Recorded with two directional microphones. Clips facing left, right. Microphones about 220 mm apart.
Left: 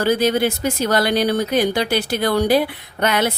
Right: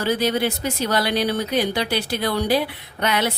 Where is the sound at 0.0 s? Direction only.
45° left (ahead or behind).